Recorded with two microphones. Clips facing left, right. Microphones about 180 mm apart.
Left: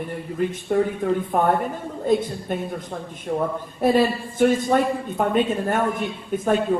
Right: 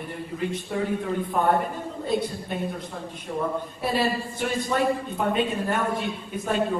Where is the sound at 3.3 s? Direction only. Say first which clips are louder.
Left 3 dB; 45° left (ahead or behind).